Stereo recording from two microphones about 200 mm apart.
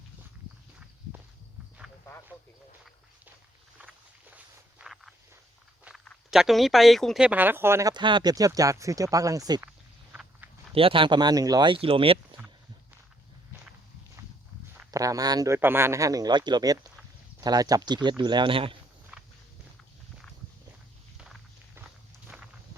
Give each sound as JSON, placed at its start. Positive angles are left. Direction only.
{"t": 3.8, "sound": "walk", "side_deg": -10}
{"t": 5.8, "sound": "speech", "side_deg": 0}
{"t": 10.1, "sound": "walk", "side_deg": -5}
{"t": 10.8, "sound": "speech", "side_deg": -25}
{"t": 14.8, "sound": "speech", "side_deg": -15}
{"t": 19.1, "sound": "walk", "side_deg": -5}
{"t": 22.3, "sound": "walk", "side_deg": -5}